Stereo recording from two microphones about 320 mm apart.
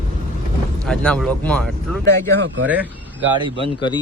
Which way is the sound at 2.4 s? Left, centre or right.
Right.